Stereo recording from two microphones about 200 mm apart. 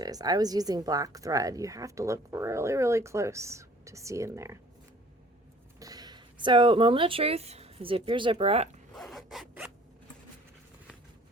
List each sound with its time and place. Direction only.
0.0 s a woman's voice: 20° right (ahead or behind)
5.8 s speech: 20° right (ahead or behind)
9.0 s zipper: centre (ahead or behind)